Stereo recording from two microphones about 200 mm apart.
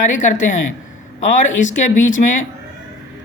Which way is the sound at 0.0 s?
40° left (ahead or behind).